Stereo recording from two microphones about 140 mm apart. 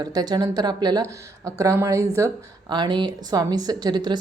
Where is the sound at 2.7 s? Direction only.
30° right (ahead or behind).